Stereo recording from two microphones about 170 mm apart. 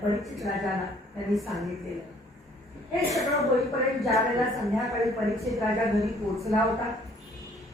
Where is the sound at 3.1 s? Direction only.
Centre (ahead or behind).